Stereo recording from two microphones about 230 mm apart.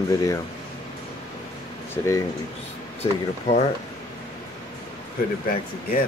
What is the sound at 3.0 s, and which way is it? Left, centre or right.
Speech, left.